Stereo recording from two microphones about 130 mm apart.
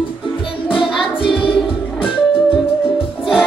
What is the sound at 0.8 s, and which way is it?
Music, 40° left (ahead or behind).